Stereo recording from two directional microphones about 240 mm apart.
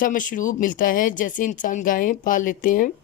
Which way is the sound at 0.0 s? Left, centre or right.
Left.